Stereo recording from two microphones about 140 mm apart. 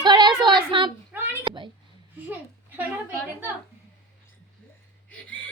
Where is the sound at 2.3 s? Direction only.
10° right (ahead or behind).